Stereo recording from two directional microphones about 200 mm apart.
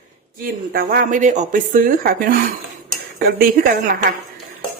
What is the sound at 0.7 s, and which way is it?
A woman's voice, 45° right (ahead or behind).